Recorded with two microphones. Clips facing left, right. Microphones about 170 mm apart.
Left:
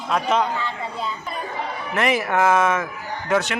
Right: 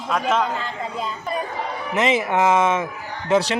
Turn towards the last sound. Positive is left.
turn(degrees=-30)  # may be behind; listen again after turning